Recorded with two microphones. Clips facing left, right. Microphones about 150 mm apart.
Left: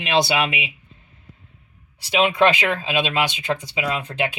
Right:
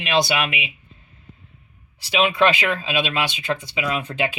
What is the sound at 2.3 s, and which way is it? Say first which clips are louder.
Speech: left 1 dB; 20° left (ahead or behind).